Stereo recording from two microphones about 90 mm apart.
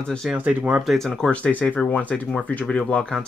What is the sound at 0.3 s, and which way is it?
Speech, 20° right (ahead or behind).